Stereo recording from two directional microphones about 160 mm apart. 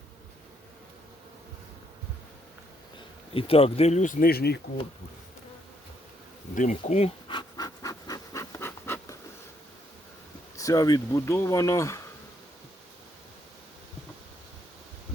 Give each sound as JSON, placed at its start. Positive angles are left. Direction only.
{"t": 3.3, "sound": "speech", "side_deg": 35}
{"t": 6.5, "sound": "speech", "side_deg": 55}
{"t": 7.3, "sound": "pant", "side_deg": 25}
{"t": 10.6, "sound": "speech", "side_deg": 20}